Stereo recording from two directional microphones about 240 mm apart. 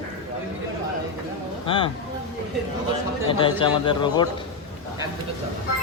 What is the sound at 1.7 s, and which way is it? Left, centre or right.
Speech, left.